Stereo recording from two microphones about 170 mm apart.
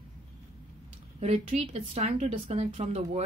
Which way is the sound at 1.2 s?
40° right (ahead or behind).